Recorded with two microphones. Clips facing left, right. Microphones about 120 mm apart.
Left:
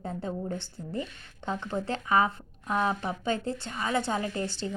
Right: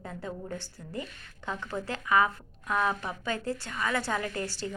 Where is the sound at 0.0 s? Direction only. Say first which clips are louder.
Left 5 dB; 30° left (ahead or behind).